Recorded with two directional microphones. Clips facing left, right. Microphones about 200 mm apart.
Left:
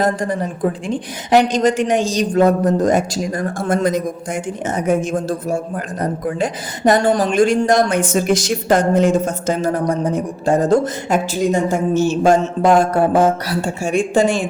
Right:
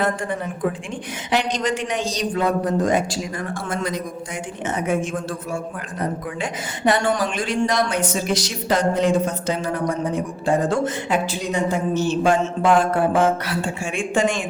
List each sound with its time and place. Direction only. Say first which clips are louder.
0.0 s speech: left 5 dB; 40° left (ahead or behind)